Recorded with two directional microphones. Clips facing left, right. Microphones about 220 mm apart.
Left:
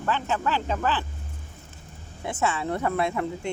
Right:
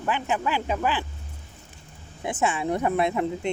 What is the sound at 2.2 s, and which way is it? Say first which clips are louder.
Speech: right 2 dB; 15° right (ahead or behind).